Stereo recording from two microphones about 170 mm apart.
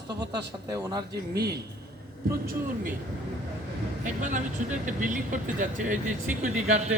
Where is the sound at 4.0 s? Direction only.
50° right (ahead or behind).